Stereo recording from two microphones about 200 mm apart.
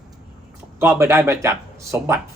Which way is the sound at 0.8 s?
10° right (ahead or behind).